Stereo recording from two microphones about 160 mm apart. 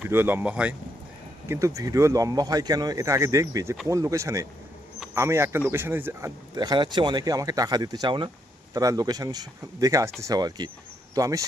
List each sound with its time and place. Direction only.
0.0 s speech: 15° right (ahead or behind)
1.5 s speech: 20° right (ahead or behind)